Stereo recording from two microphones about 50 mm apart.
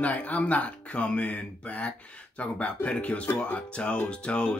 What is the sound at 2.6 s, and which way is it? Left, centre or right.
Speech, left.